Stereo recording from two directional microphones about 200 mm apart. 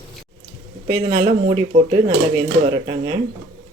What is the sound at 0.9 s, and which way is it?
A man's voice, 20° right (ahead or behind).